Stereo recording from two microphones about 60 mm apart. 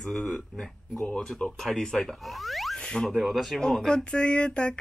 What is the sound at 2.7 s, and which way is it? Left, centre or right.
Zipper, centre.